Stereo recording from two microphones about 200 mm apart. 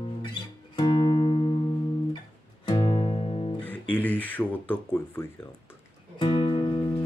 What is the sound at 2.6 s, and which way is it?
Music, 20° left (ahead or behind).